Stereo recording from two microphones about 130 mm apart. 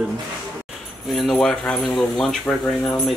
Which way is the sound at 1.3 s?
5° left (ahead or behind).